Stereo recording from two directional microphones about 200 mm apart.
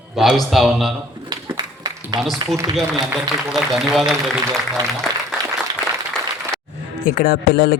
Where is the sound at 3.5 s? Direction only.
Centre (ahead or behind).